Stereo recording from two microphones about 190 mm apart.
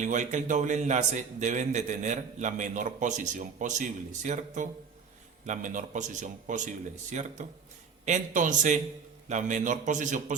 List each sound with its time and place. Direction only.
0.0 s a man's voice: 40° right (ahead or behind)